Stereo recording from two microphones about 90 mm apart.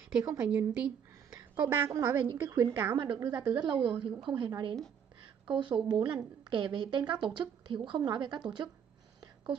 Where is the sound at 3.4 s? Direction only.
55° right (ahead or behind).